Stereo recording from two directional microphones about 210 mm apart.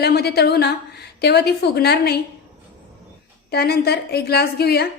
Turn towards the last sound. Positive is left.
turn(degrees=50)  # may be behind; listen again after turning